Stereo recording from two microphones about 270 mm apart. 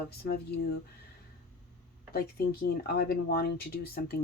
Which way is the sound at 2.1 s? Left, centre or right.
Left.